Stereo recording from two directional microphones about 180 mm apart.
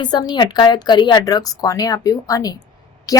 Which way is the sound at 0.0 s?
25° left (ahead or behind).